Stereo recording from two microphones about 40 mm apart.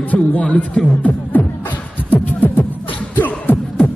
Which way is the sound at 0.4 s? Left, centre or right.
Left.